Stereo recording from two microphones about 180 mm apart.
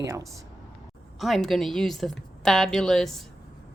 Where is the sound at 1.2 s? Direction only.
Centre (ahead or behind).